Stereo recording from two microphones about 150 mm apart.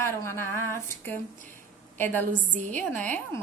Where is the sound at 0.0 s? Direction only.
20° left (ahead or behind).